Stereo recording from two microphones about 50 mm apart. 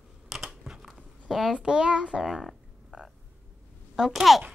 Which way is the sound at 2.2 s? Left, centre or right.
Centre.